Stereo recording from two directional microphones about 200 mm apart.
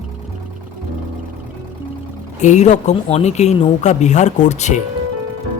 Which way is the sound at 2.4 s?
35° left (ahead or behind).